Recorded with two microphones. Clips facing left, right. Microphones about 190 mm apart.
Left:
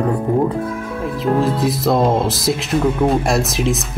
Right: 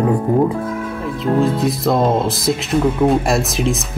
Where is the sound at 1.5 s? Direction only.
Centre (ahead or behind).